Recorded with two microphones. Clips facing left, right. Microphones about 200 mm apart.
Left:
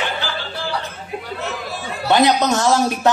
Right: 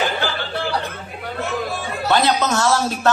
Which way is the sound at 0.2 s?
55° right (ahead or behind).